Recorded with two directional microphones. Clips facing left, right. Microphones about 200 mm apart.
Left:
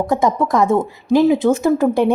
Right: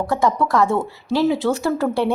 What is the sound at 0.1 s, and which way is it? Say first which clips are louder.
A woman's voice: left 1 dB; 20° left (ahead or behind).